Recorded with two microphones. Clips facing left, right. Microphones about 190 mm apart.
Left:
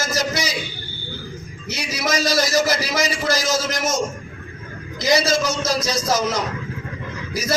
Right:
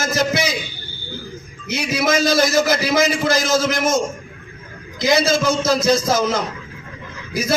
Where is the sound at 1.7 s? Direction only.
55° right (ahead or behind).